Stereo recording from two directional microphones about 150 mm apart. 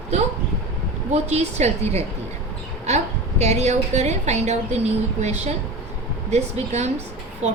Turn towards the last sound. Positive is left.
turn(degrees=-50)  # may be behind; listen again after turning